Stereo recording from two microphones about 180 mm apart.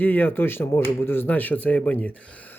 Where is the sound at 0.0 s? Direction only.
10° left (ahead or behind).